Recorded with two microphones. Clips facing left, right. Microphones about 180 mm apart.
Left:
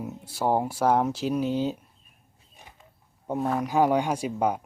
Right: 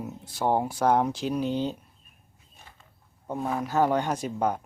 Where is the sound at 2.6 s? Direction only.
15° left (ahead or behind).